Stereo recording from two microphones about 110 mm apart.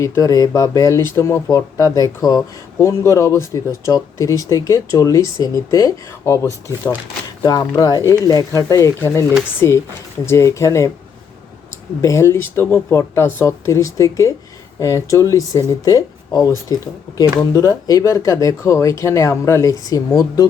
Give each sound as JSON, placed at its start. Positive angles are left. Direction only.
{"t": 0.0, "sound": "speech", "side_deg": 30}
{"t": 12.0, "sound": "speech", "side_deg": 25}